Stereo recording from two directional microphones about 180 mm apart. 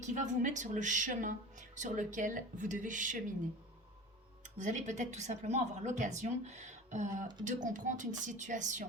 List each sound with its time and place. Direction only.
0.0 s a woman's voice: 40° right (ahead or behind)
4.4 s a woman's voice: 40° right (ahead or behind)